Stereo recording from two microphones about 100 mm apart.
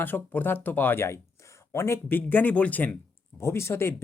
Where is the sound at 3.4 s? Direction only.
25° left (ahead or behind).